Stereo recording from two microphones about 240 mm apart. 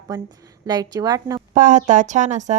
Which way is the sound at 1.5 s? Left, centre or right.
Right.